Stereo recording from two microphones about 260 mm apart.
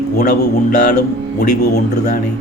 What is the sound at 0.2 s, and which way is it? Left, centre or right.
A man's voice, left.